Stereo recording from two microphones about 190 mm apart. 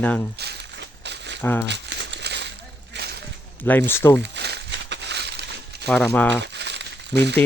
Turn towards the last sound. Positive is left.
turn(degrees=-65)  # may be behind; listen again after turning